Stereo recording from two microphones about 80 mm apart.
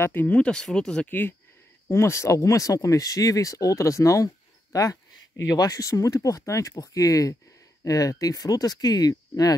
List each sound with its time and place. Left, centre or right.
0.0 s speech: left
0.4 s speech: centre
1.0 s speech: left
1.9 s speech: left
5.6 s speech: left